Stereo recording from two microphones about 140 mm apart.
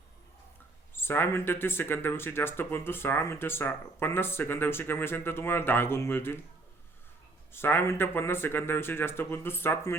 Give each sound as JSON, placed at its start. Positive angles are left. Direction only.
{"t": 0.9, "sound": "speech", "side_deg": 15}
{"t": 7.5, "sound": "speech", "side_deg": 15}